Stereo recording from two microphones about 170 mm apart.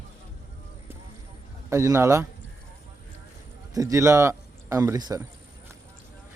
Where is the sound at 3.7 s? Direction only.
20° right (ahead or behind).